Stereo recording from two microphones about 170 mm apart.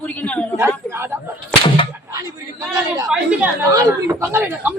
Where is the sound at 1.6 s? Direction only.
30° left (ahead or behind).